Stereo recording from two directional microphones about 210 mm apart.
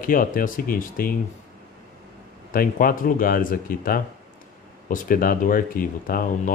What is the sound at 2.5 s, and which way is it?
Speech, 40° left (ahead or behind).